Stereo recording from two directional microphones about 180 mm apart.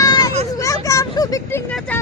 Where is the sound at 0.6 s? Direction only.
20° left (ahead or behind).